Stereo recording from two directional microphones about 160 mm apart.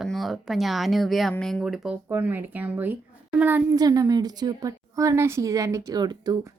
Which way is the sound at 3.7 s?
25° right (ahead or behind).